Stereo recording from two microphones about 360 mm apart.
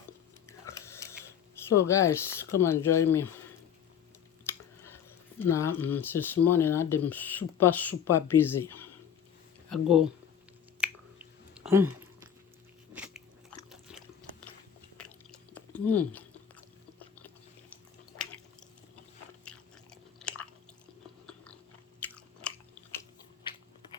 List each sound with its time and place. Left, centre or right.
0.4 s a sound: centre
1.7 s speech: centre
5.4 s speech: centre
10.8 s finger snapping: centre
12.9 s biting: centre
14.9 s chewing: centre
18.1 s squish: left
19.5 s biting: centre
22.0 s chewing: centre